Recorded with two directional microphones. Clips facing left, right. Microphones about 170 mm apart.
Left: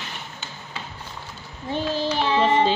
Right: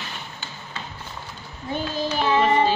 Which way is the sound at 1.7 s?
30° left (ahead or behind).